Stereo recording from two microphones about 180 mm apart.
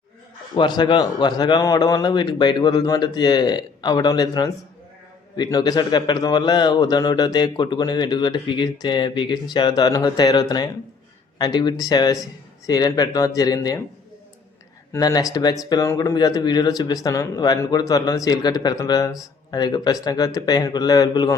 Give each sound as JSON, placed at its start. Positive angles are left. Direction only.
{"t": 0.5, "sound": "a man's voice", "side_deg": 25}
{"t": 14.9, "sound": "a man's voice", "side_deg": 20}